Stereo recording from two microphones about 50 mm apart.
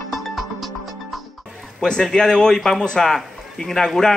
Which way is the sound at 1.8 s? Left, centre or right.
Centre.